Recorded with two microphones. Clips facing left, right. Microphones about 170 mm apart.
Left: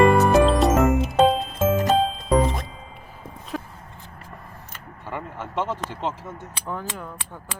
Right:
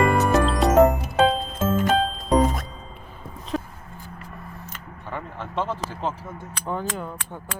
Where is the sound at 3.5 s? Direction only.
Centre (ahead or behind).